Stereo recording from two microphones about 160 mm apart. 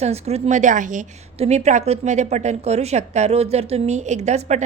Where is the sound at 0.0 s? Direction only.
40° right (ahead or behind).